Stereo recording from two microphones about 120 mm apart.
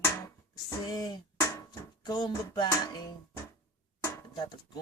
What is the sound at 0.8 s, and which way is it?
Speech, 35° left (ahead or behind).